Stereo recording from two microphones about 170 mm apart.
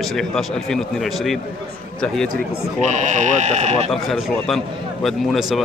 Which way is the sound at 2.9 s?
45° right (ahead or behind).